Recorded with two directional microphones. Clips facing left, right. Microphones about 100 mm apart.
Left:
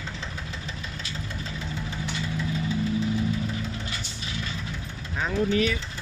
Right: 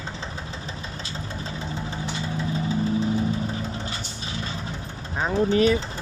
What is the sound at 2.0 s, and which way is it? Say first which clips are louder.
Vehicle: right 1 dB; 30° right (ahead or behind).